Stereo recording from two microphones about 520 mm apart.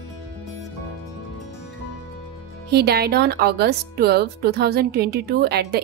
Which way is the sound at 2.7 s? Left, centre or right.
Centre.